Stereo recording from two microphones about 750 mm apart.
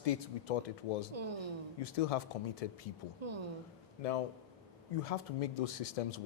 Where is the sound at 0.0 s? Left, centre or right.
Left.